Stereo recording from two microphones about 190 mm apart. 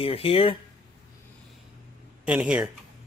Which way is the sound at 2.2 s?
5° right (ahead or behind).